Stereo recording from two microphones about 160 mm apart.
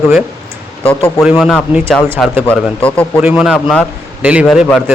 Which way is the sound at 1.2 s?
Centre (ahead or behind).